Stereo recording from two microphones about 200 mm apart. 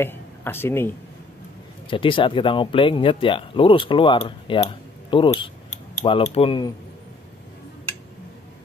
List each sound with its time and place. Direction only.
0.0 s speech: 10° left (ahead or behind)
1.9 s speech: 25° left (ahead or behind)